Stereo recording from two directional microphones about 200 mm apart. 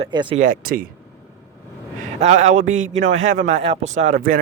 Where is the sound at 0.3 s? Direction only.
40° right (ahead or behind).